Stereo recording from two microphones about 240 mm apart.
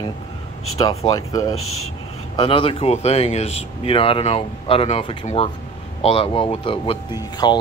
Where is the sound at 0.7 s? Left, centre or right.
Centre.